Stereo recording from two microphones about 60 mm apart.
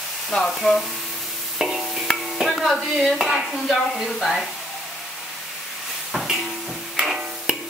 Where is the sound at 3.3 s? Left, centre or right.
Centre.